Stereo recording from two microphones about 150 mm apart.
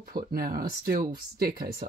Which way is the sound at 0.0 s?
85° right.